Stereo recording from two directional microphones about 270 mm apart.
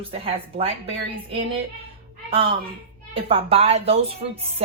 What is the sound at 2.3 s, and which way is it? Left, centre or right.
A woman's voice, centre.